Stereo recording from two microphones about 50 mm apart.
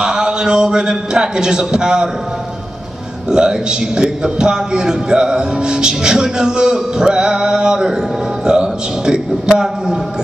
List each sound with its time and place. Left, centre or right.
0.0 s a man's voice: centre
3.3 s a man's voice: centre